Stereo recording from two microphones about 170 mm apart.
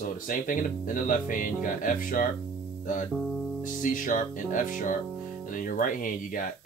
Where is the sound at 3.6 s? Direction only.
50° left (ahead or behind).